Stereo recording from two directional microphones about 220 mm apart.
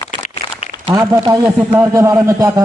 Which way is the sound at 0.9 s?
15° right (ahead or behind).